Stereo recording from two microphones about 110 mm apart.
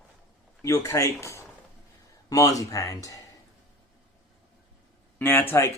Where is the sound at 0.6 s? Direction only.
30° left (ahead or behind).